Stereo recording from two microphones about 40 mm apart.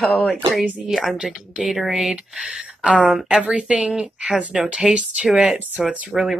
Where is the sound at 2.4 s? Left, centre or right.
Right.